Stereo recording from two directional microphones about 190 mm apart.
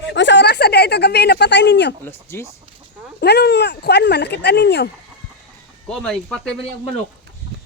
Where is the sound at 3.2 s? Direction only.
60° left (ahead or behind).